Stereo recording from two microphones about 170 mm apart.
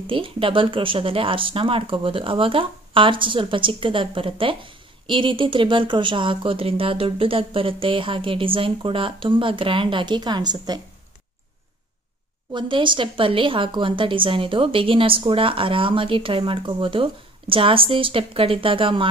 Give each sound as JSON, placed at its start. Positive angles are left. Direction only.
{"t": 0.0, "sound": "speech", "side_deg": -30}
{"t": 12.5, "sound": "speech", "side_deg": -30}